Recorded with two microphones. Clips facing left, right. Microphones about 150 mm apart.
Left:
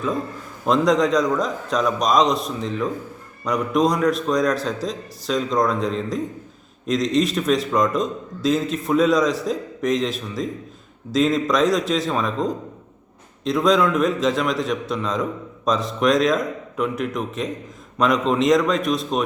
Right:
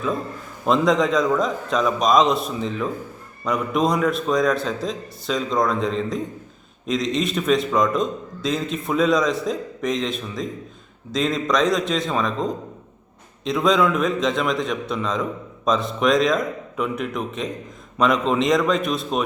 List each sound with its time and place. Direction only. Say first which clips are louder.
0.6 s a man's voice: left 1 dB; centre (ahead or behind)